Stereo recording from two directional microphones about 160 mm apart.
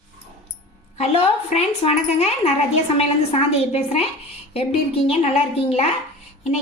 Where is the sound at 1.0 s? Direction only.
40° left (ahead or behind).